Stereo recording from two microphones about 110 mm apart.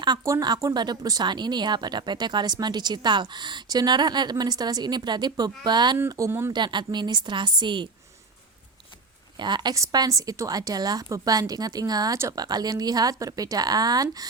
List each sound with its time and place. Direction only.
0.3 s speech: 35° right (ahead or behind)
6.1 s speech: 30° right (ahead or behind)
6.5 s a woman's voice: 45° right (ahead or behind)
9.4 s speech: 40° right (ahead or behind)